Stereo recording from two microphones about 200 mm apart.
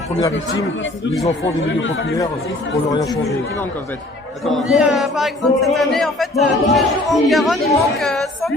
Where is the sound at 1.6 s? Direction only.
70° left (ahead or behind).